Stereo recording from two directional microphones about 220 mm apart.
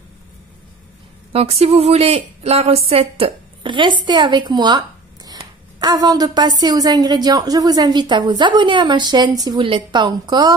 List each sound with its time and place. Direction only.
1.3 s a woman's voice: 30° right (ahead or behind)